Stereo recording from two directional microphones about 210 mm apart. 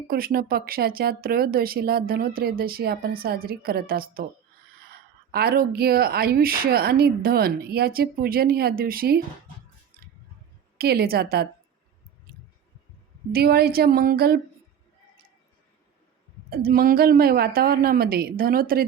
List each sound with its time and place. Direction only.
0.1 s speech: 45° right (ahead or behind)
5.3 s speech: 45° right (ahead or behind)
10.8 s speech: 45° right (ahead or behind)
13.3 s speech: 45° right (ahead or behind)
16.5 s speech: 45° right (ahead or behind)